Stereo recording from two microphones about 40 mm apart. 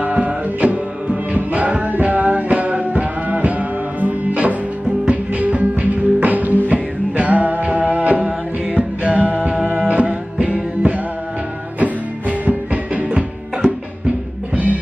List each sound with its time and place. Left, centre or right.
0.0 s music: right
11.8 s music: right